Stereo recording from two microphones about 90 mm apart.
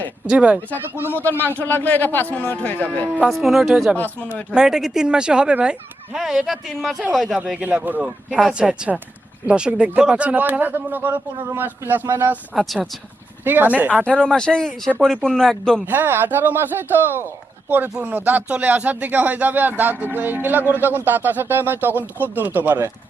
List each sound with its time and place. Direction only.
0.3 s speech: 15° right (ahead or behind)
1.1 s speech: 20° left (ahead or behind)
3.2 s speech: centre (ahead or behind)
3.9 s speech: 20° left (ahead or behind)
4.5 s speech: 5° right (ahead or behind)
7.3 s speech: 10° right (ahead or behind)
12.5 s speech: centre (ahead or behind)
13.4 s speech: 20° right (ahead or behind)
14.0 s speech: 10° left (ahead or behind)
15.9 s speech: 25° right (ahead or behind)